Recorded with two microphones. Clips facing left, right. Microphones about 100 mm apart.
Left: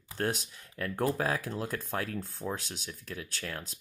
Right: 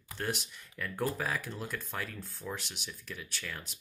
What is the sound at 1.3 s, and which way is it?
Speech, 40° left (ahead or behind).